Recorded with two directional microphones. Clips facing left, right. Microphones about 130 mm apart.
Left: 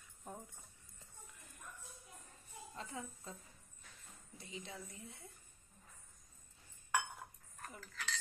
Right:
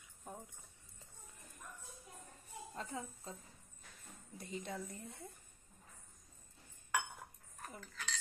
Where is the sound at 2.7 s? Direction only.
35° right (ahead or behind).